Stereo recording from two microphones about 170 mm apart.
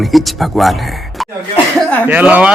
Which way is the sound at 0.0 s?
Centre (ahead or behind).